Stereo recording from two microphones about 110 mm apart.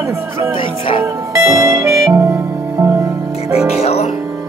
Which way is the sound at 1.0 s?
30° right (ahead or behind).